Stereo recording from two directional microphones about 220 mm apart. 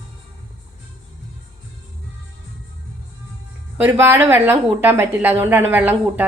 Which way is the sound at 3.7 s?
10° right (ahead or behind).